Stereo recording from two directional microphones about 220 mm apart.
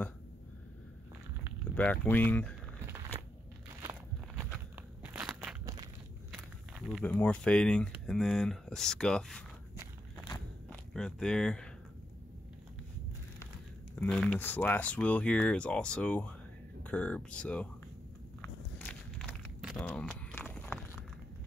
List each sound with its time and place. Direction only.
1.8 s speech: 5° left (ahead or behind)
3.1 s a sound: 20° right (ahead or behind)
4.7 s crackle: 10° right (ahead or behind)
6.3 s speech: centre (ahead or behind)
10.7 s speech: 5° left (ahead or behind)
13.9 s speech: 5° left (ahead or behind)
18.4 s walk: 10° left (ahead or behind)